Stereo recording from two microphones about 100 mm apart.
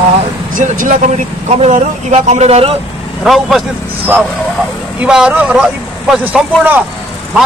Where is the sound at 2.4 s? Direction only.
80° right.